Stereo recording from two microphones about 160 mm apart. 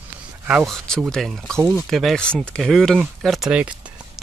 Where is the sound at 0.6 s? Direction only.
5° left (ahead or behind).